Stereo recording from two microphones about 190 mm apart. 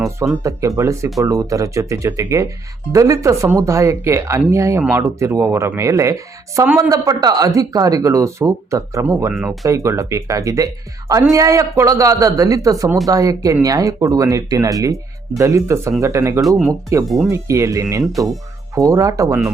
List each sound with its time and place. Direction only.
0.4 s speech: 15° right (ahead or behind)
16.4 s speech: centre (ahead or behind)
17.2 s speech: 15° right (ahead or behind)